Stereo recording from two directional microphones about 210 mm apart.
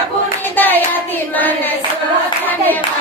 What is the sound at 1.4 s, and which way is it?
Clapping, 10° left (ahead or behind).